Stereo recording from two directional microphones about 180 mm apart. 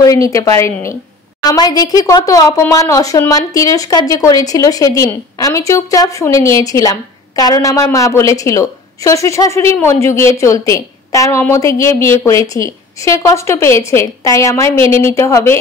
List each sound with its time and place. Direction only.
0.0 s a woman's voice: 20° left (ahead or behind)